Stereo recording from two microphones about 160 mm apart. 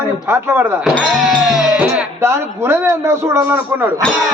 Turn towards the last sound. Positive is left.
turn(degrees=-10)  # may be behind; listen again after turning